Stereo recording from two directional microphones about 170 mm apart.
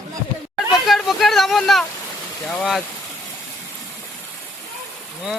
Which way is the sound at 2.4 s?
5° left (ahead or behind).